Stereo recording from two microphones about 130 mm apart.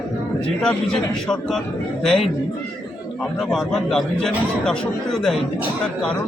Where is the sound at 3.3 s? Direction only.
Centre (ahead or behind).